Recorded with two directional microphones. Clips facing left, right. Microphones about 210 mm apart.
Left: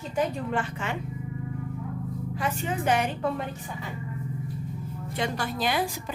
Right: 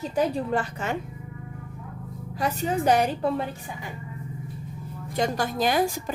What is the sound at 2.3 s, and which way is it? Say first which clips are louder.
A woman's voice: right 5 dB; 40° right (ahead or behind).